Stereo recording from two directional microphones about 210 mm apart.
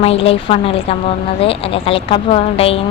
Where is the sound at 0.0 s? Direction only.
25° left (ahead or behind).